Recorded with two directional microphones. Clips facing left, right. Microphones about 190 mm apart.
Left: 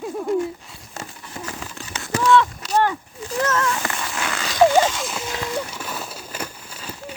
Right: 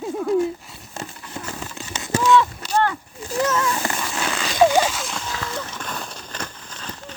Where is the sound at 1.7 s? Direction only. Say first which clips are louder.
Right 3 dB; 20° right (ahead or behind).